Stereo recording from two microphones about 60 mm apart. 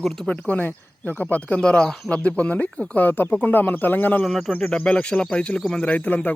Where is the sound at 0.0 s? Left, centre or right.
Centre.